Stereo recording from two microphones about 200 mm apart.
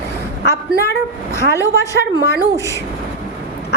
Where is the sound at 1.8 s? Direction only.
15° left (ahead or behind).